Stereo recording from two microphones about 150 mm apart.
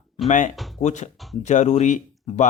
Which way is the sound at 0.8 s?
50° left (ahead or behind).